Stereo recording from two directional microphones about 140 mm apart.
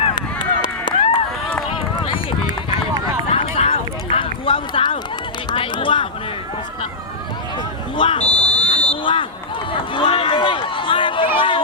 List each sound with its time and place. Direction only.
0.3 s run: 35° left (ahead or behind)
3.2 s run: 50° left (ahead or behind)
7.9 s buzzer: 35° left (ahead or behind)
8.2 s buzzer: 5° left (ahead or behind)
9.7 s run: 40° left (ahead or behind)
11.3 s chatter: 35° left (ahead or behind)